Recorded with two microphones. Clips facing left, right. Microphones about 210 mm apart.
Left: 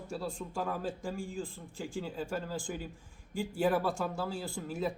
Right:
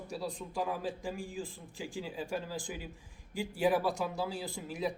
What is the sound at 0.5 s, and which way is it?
Speech, 15° right (ahead or behind).